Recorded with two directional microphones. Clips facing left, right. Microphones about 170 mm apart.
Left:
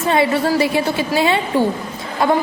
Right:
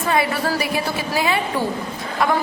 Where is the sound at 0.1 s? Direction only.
25° left (ahead or behind).